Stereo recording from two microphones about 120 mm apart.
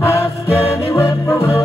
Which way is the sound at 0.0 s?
25° left (ahead or behind).